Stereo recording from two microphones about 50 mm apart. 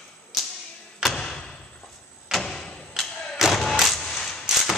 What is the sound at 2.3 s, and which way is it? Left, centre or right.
Door, centre.